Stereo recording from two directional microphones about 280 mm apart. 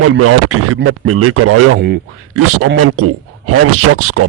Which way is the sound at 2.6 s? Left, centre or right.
Right.